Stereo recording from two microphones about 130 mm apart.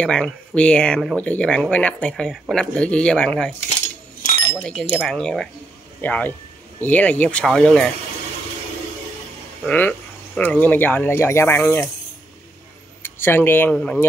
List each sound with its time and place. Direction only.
0.0 s speech: 5° left (ahead or behind)
4.6 s speech: 5° left (ahead or behind)
9.7 s speech: 10° left (ahead or behind)
13.0 s speech: 15° left (ahead or behind)